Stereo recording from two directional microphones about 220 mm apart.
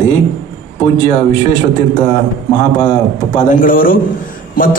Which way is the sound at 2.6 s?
20° left (ahead or behind).